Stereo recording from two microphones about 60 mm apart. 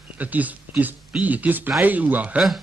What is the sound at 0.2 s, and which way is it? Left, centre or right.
Speech, right.